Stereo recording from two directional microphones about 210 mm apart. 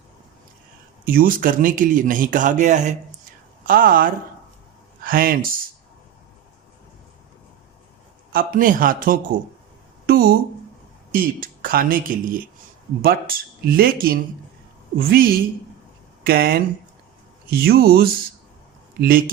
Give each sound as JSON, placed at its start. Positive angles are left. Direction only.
{"t": 1.0, "sound": "speech", "side_deg": -40}
{"t": 8.3, "sound": "speech", "side_deg": -45}